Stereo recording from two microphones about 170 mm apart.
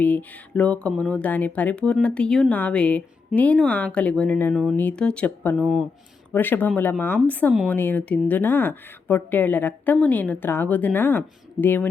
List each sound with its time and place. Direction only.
0.0 s speech: 10° left (ahead or behind)
5.5 s speech: 5° right (ahead or behind)
6.3 s speech: 10° left (ahead or behind)